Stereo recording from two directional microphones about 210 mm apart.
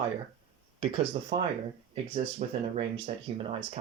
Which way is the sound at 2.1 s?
30° right (ahead or behind).